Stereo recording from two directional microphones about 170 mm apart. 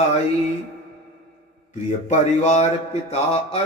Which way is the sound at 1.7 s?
45° left (ahead or behind).